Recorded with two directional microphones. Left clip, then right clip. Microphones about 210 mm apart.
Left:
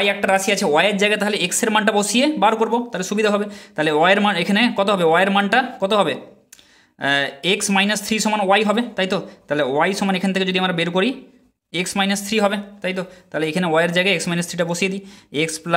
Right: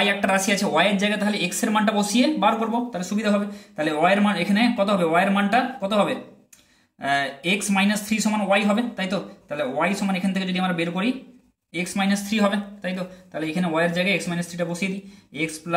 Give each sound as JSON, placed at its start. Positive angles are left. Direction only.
{"t": 0.0, "sound": "speech", "side_deg": 25}